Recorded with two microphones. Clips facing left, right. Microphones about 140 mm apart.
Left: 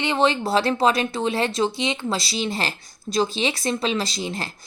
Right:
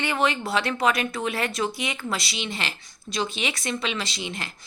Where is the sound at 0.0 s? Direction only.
25° left (ahead or behind).